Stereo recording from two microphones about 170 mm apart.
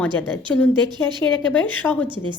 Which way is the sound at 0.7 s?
25° right (ahead or behind).